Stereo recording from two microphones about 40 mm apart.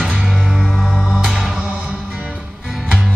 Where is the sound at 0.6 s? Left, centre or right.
Centre.